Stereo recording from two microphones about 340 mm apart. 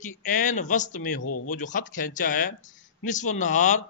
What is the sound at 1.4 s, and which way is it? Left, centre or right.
Speech, left.